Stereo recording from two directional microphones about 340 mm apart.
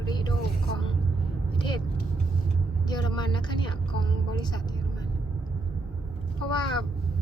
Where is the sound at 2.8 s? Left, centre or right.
Centre.